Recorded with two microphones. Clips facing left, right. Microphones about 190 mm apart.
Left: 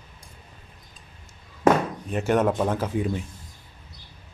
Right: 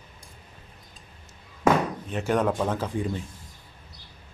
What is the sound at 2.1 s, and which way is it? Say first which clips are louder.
Speech: left 3 dB; 5° left (ahead or behind).